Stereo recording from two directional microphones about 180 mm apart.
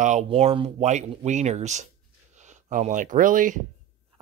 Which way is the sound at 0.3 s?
30° right (ahead or behind).